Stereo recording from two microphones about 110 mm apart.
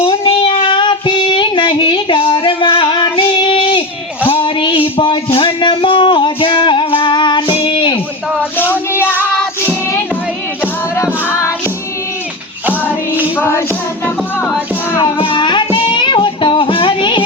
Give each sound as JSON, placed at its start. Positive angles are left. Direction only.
{"t": 0.3, "sound": "child singing", "side_deg": 55}
{"t": 4.3, "sound": "music", "side_deg": 50}
{"t": 7.5, "sound": "a sound", "side_deg": 55}
{"t": 8.5, "sound": "child singing", "side_deg": 15}
{"t": 13.3, "sound": "music", "side_deg": 20}
{"t": 15.2, "sound": "music", "side_deg": 45}